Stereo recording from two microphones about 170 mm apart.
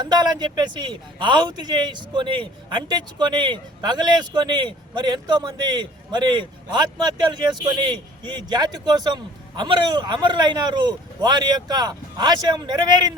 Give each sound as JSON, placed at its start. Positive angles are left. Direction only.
{"t": 0.0, "sound": "a man's voice", "side_deg": -25}